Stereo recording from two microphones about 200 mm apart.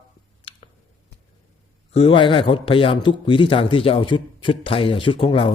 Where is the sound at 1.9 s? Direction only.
30° left (ahead or behind).